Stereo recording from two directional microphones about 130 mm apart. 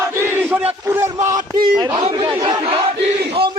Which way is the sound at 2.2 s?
35° right (ahead or behind).